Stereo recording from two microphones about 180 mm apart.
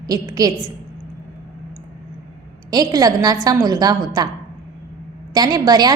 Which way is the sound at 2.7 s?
20° right (ahead or behind).